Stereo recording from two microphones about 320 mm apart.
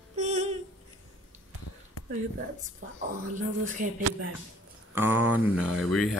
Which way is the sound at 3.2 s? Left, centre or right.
Right.